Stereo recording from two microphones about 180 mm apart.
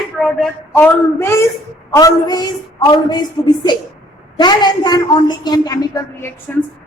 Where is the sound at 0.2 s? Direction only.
5° left (ahead or behind).